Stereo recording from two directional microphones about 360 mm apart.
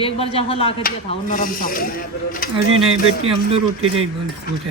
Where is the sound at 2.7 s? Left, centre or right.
Right.